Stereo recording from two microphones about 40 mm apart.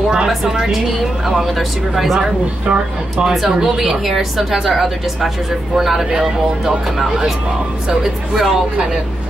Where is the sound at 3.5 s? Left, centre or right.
Centre.